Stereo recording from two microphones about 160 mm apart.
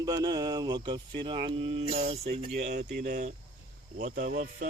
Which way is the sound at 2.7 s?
90° right.